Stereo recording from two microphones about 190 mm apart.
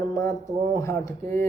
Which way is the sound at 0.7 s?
15° left (ahead or behind).